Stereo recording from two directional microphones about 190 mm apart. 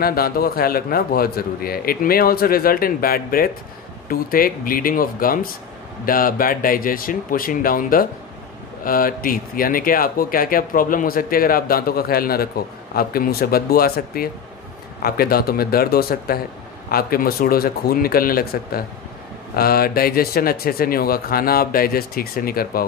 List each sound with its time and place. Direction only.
0.0 s speech: 50° left (ahead or behind)